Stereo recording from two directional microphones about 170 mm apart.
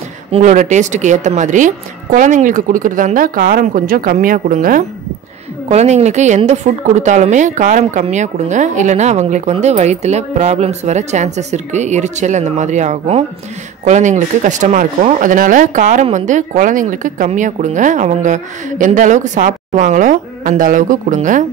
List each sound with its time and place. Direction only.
0.3 s speech: 45° right (ahead or behind)
5.7 s speech: 40° right (ahead or behind)